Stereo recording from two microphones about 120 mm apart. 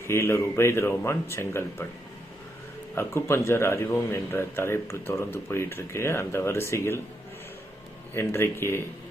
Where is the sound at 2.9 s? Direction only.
20° left (ahead or behind).